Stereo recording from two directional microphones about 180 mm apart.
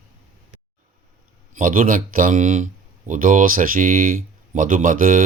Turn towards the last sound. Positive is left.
turn(degrees=-50)  # may be behind; listen again after turning